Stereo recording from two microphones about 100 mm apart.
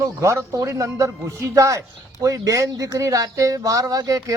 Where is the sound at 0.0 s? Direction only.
30° right (ahead or behind).